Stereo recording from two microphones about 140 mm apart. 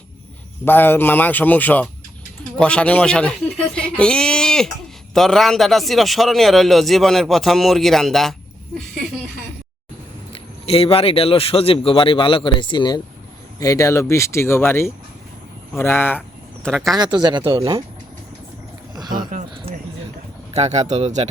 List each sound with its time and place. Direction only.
0.6 s a man's voice: 15° left (ahead or behind)
10.3 s speech: 45° left (ahead or behind); by 16.2 s 15° left (ahead or behind)
16.6 s a man's voice: centre (ahead or behind)
17.0 s speech: 30° right (ahead or behind)
20.5 s speech: 50° right (ahead or behind)